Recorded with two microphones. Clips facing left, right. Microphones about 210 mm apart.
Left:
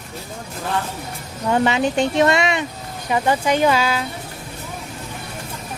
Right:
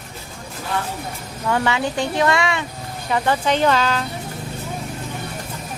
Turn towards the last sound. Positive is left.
turn(degrees=10)  # may be behind; listen again after turning